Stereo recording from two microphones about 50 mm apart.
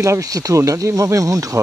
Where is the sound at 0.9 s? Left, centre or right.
Right.